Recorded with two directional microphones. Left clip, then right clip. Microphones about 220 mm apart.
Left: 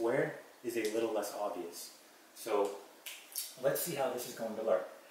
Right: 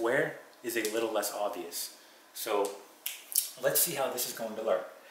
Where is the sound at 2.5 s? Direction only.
15° left (ahead or behind).